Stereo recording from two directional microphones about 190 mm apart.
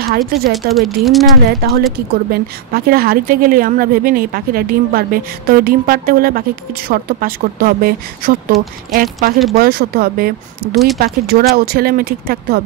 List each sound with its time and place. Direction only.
0.2 s speech: centre (ahead or behind)
1.6 s a woman's voice: 55° right (ahead or behind)
10.7 s speech: centre (ahead or behind)
11.0 s a woman's voice: 50° right (ahead or behind)